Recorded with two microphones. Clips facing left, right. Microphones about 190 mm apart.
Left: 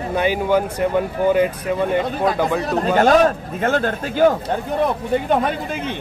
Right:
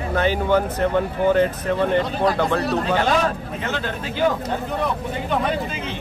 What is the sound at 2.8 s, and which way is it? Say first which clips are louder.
Speech: left 6 dB; 45° left (ahead or behind).